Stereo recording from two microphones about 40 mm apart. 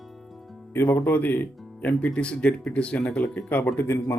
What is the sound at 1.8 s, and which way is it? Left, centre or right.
Speech, left.